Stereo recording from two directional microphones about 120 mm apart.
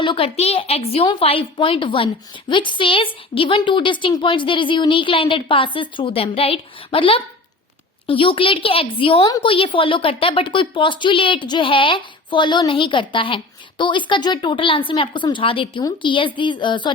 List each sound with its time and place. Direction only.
0.0 s a woman's voice: 45° left (ahead or behind)